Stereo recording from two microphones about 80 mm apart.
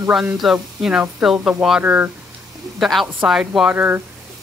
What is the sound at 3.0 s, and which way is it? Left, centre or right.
Speech, centre.